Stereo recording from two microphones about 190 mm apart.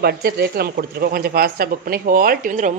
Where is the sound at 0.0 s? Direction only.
55° right (ahead or behind).